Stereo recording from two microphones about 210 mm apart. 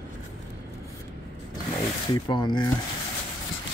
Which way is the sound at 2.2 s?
20° left (ahead or behind).